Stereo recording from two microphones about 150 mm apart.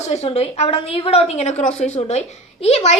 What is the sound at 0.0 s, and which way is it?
A woman's voice, 45° left (ahead or behind).